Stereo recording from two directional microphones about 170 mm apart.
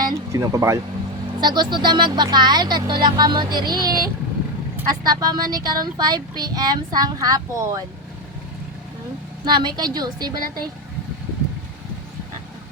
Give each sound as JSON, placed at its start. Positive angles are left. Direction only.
{"t": 0.0, "sound": "speech", "side_deg": -20}
{"t": 9.4, "sound": "speech", "side_deg": -25}